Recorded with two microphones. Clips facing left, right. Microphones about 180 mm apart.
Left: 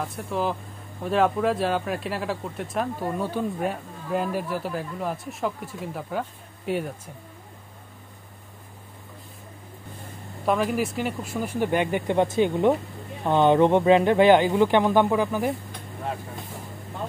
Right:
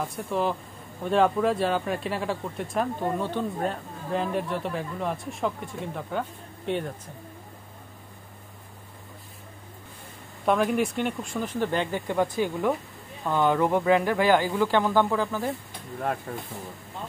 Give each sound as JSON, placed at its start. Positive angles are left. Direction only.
{"t": 0.0, "sound": "speech", "side_deg": 0}
{"t": 10.4, "sound": "speech", "side_deg": 0}